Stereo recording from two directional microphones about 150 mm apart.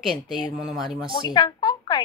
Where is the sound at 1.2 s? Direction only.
30° left (ahead or behind).